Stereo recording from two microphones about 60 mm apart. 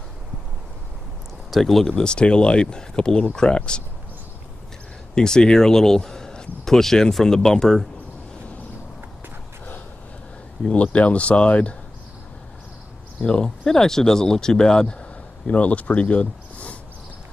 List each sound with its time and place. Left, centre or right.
1.5 s speech: centre
5.1 s speech: centre
10.6 s speech: centre
13.2 s speech: centre